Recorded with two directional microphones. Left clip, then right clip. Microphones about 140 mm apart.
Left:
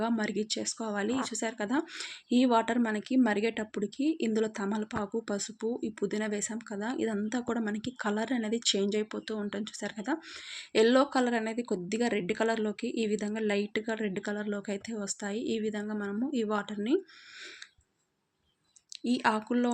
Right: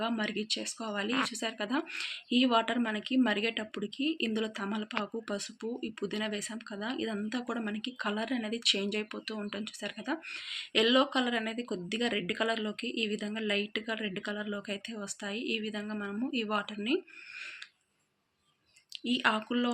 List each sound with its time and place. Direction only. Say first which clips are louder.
0.2 s speech: left 1 dB; 25° left (ahead or behind)
19.0 s speech: left 1 dB; 25° left (ahead or behind)